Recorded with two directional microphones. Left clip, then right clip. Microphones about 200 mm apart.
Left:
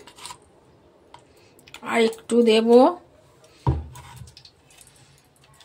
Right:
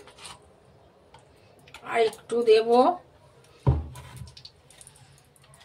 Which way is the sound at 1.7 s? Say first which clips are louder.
Left 3 dB; 55° left (ahead or behind).